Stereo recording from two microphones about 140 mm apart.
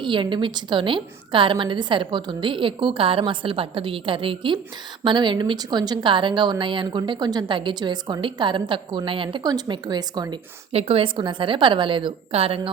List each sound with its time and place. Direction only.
0.0 s a woman's voice: 35° right (ahead or behind)
10.7 s a woman's voice: 45° right (ahead or behind)